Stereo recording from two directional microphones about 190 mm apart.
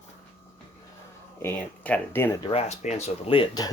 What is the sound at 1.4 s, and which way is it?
Speech, 10° left (ahead or behind).